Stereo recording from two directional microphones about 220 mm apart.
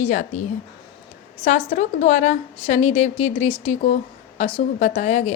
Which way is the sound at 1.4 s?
30° left (ahead or behind).